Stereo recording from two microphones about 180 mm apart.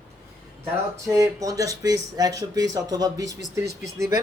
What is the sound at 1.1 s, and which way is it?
Speech, 20° right (ahead or behind).